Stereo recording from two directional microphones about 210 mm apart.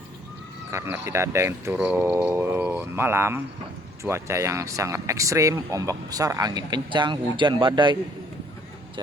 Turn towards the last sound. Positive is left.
turn(degrees=-20)  # may be behind; listen again after turning